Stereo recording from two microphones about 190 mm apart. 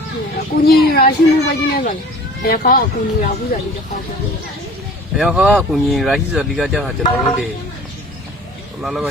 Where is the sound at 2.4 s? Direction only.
50° left (ahead or behind).